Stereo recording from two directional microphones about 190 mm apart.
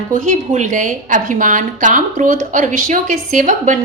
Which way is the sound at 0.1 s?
40° right (ahead or behind).